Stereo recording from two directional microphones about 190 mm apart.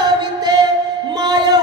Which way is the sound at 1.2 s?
20° right (ahead or behind).